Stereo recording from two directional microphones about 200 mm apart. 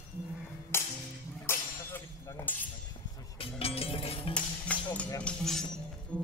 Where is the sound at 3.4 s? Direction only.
30° left (ahead or behind).